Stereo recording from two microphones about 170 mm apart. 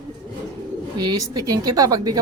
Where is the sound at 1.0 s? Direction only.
20° right (ahead or behind).